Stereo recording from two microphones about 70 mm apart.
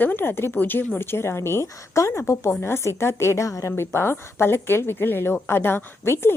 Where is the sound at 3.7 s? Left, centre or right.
Left.